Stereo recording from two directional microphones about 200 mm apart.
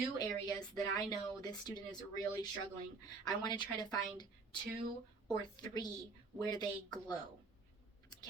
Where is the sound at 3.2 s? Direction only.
20° left (ahead or behind).